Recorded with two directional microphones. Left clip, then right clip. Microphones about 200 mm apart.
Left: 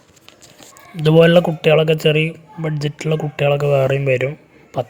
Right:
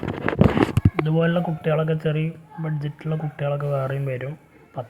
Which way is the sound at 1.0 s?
60° left (ahead or behind).